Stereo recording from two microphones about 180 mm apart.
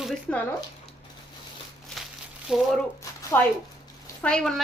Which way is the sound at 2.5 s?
5° right (ahead or behind).